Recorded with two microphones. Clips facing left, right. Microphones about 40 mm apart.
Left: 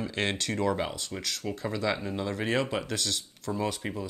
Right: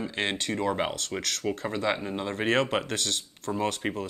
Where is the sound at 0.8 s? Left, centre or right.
Right.